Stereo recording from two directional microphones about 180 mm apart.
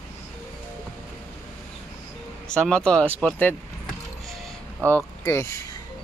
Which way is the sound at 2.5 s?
5° left (ahead or behind).